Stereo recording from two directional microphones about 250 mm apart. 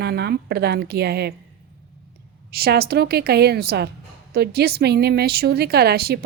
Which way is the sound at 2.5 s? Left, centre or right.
Right.